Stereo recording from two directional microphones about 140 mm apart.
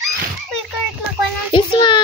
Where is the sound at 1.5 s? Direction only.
35° left (ahead or behind).